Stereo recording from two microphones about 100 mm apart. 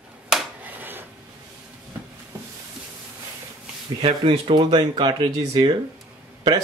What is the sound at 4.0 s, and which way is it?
Speech, 65° right (ahead or behind).